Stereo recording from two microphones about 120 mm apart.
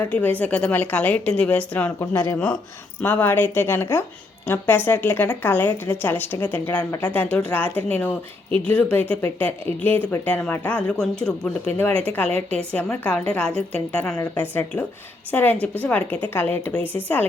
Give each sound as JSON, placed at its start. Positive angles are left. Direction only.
{"t": 0.1, "sound": "a woman's voice", "side_deg": 15}